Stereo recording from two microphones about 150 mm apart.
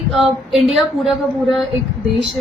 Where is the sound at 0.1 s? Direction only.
Centre (ahead or behind).